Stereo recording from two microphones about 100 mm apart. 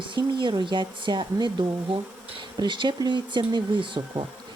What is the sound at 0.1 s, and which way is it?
Speech, 50° right (ahead or behind).